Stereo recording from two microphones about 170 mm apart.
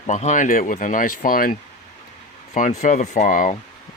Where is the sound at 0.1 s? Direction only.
45° left (ahead or behind).